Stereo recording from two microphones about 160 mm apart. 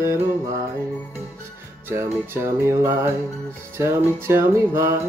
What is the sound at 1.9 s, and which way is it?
Music, 15° right (ahead or behind).